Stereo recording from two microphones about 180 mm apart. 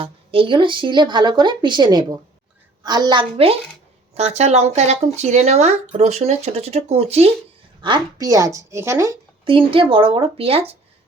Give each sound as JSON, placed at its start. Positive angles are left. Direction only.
{"t": 0.0, "sound": "speech", "side_deg": -30}
{"t": 9.4, "sound": "speech", "side_deg": -30}